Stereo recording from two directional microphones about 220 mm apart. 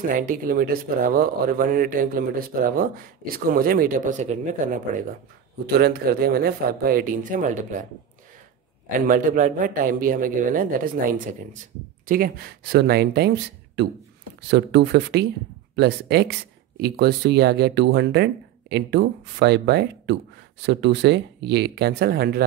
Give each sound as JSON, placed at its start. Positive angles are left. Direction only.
{"t": 0.1, "sound": "speech", "side_deg": -40}
{"t": 9.0, "sound": "speech", "side_deg": -40}